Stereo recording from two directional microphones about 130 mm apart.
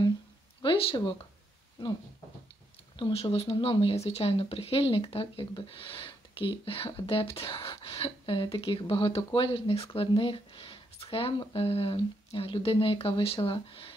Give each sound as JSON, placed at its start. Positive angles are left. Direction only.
{"t": 0.6, "sound": "speech", "side_deg": 45}
{"t": 3.0, "sound": "speech", "side_deg": 50}